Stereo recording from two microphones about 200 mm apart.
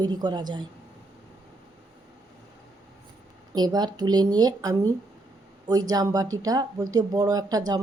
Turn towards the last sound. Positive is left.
turn(degrees=-20)  # may be behind; listen again after turning